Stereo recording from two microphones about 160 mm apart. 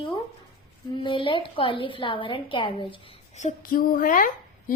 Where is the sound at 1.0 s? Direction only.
30° left (ahead or behind).